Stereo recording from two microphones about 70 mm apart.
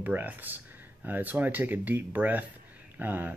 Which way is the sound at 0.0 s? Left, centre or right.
Right.